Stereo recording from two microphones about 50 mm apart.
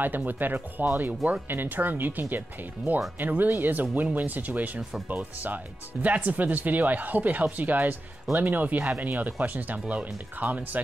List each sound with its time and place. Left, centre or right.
0.0 s speech: right